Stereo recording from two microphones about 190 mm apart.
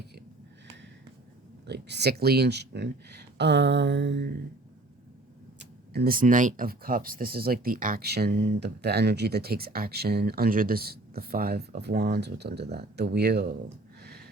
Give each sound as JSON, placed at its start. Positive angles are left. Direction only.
{"t": 1.6, "sound": "speech", "side_deg": -60}
{"t": 5.5, "sound": "speech", "side_deg": -60}
{"t": 14.0, "sound": "a sound", "side_deg": -60}